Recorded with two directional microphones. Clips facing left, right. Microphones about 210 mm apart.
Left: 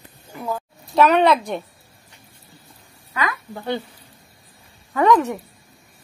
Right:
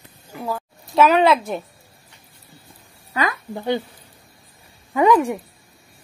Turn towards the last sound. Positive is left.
turn(degrees=-10)  # may be behind; listen again after turning